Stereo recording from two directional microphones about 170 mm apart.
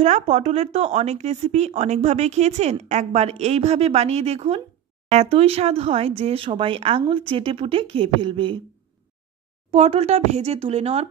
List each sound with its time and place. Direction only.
0.0 s speech: 40° right (ahead or behind)
9.7 s speech: 40° right (ahead or behind)